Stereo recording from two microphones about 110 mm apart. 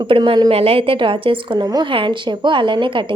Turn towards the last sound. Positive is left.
turn(degrees=-50)  # may be behind; listen again after turning